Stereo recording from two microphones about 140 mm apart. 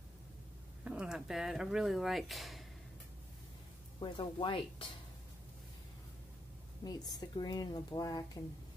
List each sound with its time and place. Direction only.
0.8 s speech: 5° right (ahead or behind)
4.0 s speech: 35° left (ahead or behind)
6.8 s speech: 30° left (ahead or behind)